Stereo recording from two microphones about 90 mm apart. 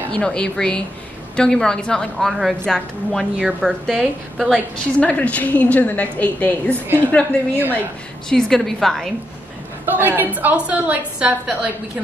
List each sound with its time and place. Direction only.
0.1 s a woman's voice: 10° left (ahead or behind)
5.0 s a woman's voice: 15° left (ahead or behind)
8.3 s a woman's voice: 5° left (ahead or behind)
9.8 s a woman's voice: 20° right (ahead or behind)